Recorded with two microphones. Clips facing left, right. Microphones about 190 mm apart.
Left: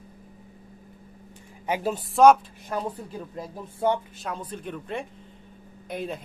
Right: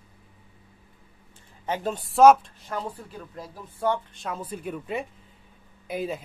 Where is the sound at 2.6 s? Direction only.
15° left (ahead or behind).